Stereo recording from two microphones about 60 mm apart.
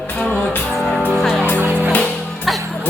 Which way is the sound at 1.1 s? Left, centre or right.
Centre.